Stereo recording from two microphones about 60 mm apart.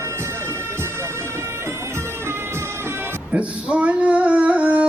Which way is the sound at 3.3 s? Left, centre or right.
Right.